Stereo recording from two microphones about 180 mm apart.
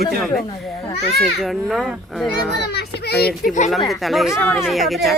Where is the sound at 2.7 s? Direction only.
60° left (ahead or behind).